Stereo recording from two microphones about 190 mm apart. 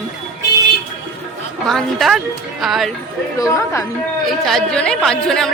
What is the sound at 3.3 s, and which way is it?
Speech, 15° left (ahead or behind).